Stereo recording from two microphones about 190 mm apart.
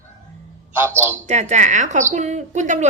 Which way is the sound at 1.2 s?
35° right (ahead or behind).